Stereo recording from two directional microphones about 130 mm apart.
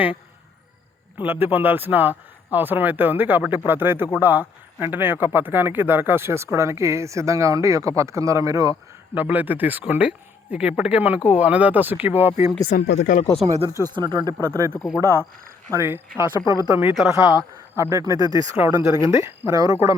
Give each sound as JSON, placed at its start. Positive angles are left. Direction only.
{"t": 1.2, "sound": "speech", "side_deg": -15}
{"t": 9.1, "sound": "speech", "side_deg": -15}
{"t": 12.7, "sound": "speech", "side_deg": 85}
{"t": 13.9, "sound": "speech", "side_deg": -35}
{"t": 14.4, "sound": "speech", "side_deg": -20}
{"t": 14.7, "sound": "speech", "side_deg": 0}
{"t": 15.7, "sound": "speech", "side_deg": -15}
{"t": 16.9, "sound": "speech", "side_deg": 0}
{"t": 17.7, "sound": "speech", "side_deg": -25}